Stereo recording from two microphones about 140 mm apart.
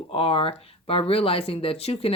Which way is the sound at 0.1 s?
40° left (ahead or behind).